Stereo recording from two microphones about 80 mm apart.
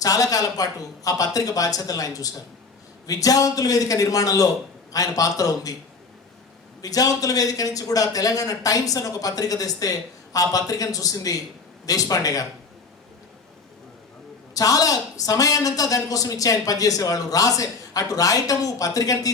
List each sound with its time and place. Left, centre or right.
0.0 s a man's voice: left
6.8 s a man's voice: left
14.5 s a man's voice: left